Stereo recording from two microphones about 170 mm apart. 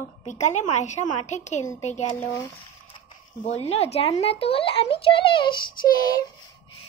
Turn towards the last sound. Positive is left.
turn(degrees=25)  # may be behind; listen again after turning